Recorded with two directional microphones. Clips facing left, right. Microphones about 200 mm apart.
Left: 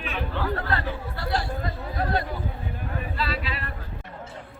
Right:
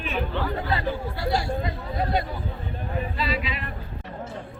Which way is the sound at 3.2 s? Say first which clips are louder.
Right 2 dB; centre (ahead or behind).